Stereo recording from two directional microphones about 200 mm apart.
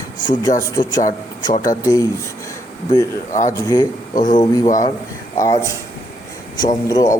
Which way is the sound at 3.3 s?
40° left (ahead or behind).